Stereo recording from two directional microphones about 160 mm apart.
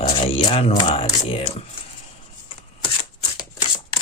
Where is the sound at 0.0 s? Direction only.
35° left (ahead or behind).